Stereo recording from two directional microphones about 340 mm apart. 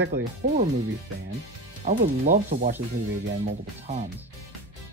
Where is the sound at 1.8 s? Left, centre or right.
Right.